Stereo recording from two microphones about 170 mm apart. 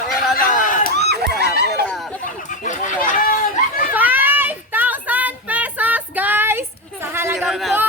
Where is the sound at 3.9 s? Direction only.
10° right (ahead or behind).